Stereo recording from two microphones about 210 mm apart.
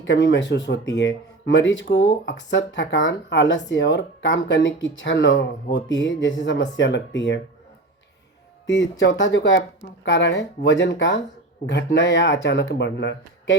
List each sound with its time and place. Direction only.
0.0 s speech: 55° left (ahead or behind)
8.6 s speech: 60° left (ahead or behind)